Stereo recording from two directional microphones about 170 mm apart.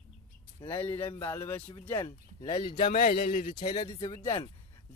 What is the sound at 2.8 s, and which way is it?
Speech, 50° left (ahead or behind).